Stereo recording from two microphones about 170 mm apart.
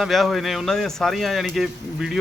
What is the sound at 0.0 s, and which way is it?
A man's voice, centre (ahead or behind).